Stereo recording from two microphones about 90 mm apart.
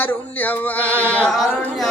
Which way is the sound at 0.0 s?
20° left (ahead or behind).